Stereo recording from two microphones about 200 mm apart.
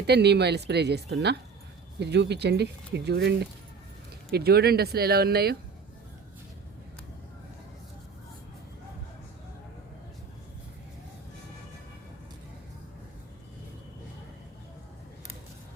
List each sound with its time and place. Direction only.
0.1 s speech: 55° right (ahead or behind)